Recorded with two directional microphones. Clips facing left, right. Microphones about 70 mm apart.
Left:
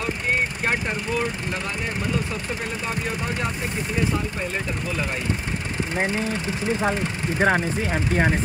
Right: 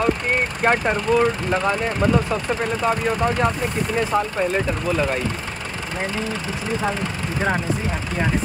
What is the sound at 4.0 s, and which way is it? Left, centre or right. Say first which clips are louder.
Speech: right 4 dB; right.